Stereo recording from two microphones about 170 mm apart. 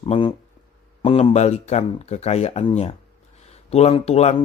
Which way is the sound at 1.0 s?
35° left (ahead or behind).